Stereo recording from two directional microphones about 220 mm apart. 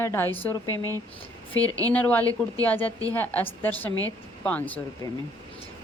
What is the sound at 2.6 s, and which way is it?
A woman's voice, 10° left (ahead or behind).